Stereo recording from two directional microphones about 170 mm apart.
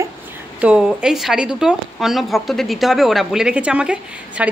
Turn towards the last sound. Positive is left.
turn(degrees=-5)  # may be behind; listen again after turning